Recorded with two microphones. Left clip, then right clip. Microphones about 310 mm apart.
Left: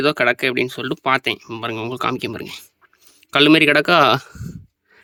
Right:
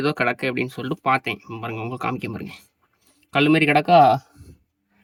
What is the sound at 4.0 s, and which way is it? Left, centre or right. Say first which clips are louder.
Speech: even; centre.